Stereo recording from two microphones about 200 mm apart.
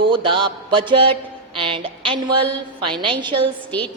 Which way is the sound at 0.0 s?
25° right (ahead or behind).